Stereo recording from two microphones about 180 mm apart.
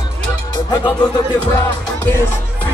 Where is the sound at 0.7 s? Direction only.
25° left (ahead or behind).